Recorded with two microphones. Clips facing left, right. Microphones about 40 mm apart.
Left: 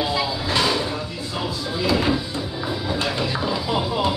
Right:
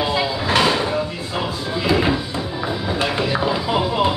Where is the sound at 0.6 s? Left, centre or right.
Right.